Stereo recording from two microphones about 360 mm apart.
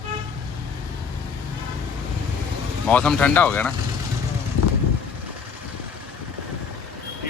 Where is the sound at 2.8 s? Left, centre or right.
Centre.